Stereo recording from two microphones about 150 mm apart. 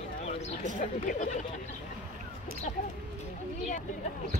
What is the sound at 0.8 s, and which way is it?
Speech, 60° left (ahead or behind).